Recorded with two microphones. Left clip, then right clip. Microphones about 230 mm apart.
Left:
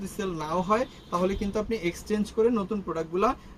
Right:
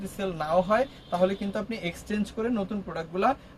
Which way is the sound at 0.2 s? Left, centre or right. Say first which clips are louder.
Right 4 dB; centre.